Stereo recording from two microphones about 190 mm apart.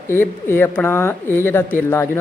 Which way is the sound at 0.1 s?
10° left (ahead or behind).